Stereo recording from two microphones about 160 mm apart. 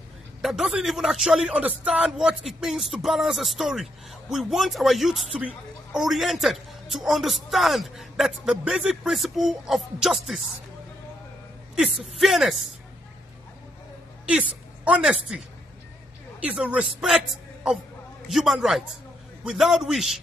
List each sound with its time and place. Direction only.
0.4 s a man's voice: centre (ahead or behind)
11.7 s a man's voice: centre (ahead or behind)
14.2 s a woman's voice: 5° right (ahead or behind)
18.3 s a man's voice: centre (ahead or behind)